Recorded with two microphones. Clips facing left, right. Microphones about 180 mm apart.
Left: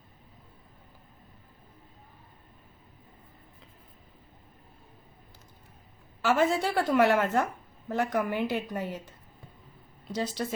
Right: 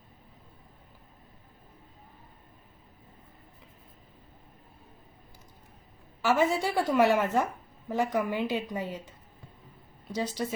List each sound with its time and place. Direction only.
6.2 s a woman's voice: 10° right (ahead or behind)